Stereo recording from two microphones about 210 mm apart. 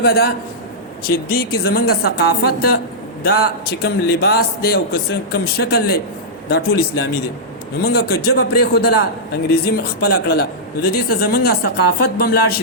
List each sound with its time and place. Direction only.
0.0 s a man's voice: 50° left (ahead or behind)